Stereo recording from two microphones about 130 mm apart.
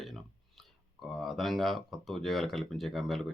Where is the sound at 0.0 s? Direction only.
Centre (ahead or behind).